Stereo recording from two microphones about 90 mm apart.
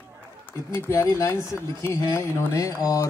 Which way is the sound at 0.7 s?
25° left (ahead or behind).